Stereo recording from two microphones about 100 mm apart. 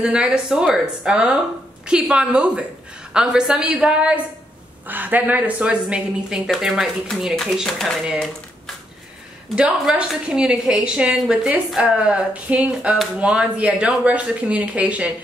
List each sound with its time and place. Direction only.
0.0 s speech: 10° right (ahead or behind)
9.6 s speech: 10° right (ahead or behind)